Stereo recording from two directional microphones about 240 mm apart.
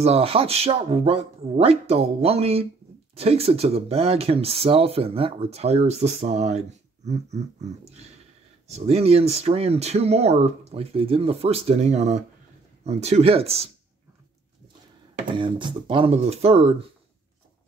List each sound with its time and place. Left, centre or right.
0.0 s speech: right
15.3 s speech: centre